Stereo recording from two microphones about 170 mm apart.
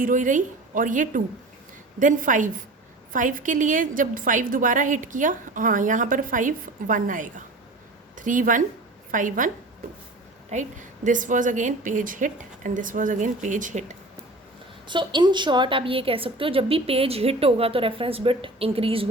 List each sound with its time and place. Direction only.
0.0 s a woman's voice: 50° right (ahead or behind)
10.5 s a woman's voice: 45° right (ahead or behind)
14.8 s a woman's voice: 25° right (ahead or behind)